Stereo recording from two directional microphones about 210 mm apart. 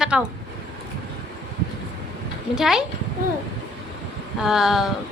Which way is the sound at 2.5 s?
Centre (ahead or behind).